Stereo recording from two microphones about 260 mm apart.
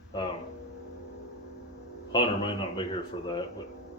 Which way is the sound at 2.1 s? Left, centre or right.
Centre.